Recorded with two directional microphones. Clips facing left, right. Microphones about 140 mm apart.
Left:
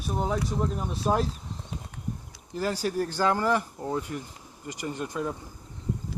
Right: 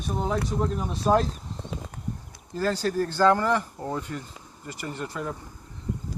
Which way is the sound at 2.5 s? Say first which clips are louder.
Right 2 dB; 10° left (ahead or behind).